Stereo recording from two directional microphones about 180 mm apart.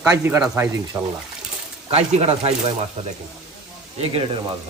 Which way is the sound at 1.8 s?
35° right (ahead or behind).